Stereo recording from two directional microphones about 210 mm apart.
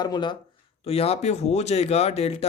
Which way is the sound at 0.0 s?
20° left (ahead or behind).